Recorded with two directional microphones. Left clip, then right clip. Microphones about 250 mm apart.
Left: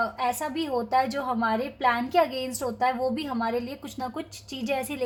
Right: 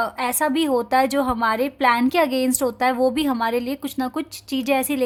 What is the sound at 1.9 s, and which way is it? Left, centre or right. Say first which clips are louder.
A woman's voice: right 4 dB; right.